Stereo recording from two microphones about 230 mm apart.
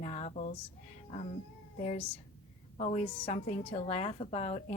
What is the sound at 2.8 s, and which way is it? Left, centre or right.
Speech, left.